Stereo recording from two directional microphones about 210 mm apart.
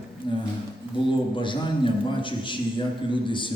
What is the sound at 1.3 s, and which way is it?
Speech, 25° left (ahead or behind).